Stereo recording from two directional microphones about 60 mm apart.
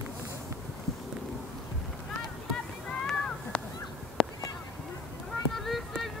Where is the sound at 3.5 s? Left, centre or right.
Centre.